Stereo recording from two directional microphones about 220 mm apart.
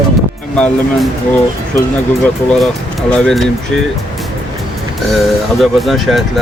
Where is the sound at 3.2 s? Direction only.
Centre (ahead or behind).